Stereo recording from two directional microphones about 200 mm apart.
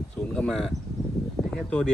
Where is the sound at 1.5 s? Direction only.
5° left (ahead or behind).